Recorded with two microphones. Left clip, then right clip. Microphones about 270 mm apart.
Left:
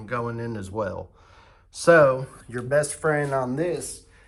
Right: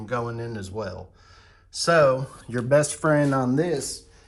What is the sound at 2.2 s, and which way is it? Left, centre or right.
Speech, centre.